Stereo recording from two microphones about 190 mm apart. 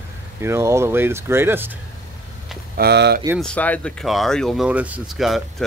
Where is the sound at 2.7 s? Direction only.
60° right (ahead or behind).